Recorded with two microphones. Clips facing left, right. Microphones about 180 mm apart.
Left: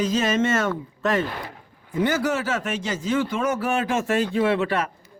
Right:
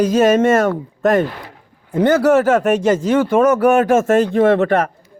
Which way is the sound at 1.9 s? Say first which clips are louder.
Right 10 dB; 60° right (ahead or behind).